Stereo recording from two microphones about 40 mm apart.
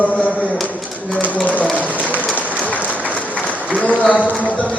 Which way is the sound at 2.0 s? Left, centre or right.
Left.